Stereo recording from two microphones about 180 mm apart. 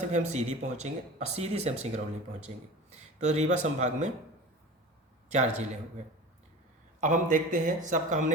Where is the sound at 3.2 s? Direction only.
40° right (ahead or behind).